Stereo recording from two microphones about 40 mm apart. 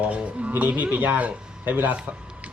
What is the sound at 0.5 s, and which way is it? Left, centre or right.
Speech, right.